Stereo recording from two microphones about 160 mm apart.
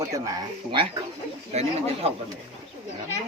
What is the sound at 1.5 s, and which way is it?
Speech, 40° right (ahead or behind).